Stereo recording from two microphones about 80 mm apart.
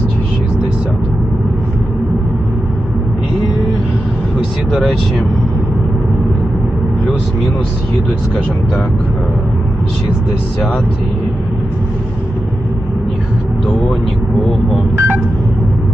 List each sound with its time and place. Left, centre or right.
4.7 s speech: centre
14.9 s telephone dialing: right